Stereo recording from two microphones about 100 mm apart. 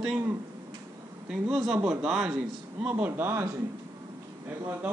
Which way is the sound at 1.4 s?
5° right (ahead or behind).